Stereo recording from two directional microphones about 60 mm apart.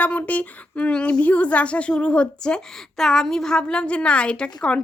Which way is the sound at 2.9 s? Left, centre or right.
Centre.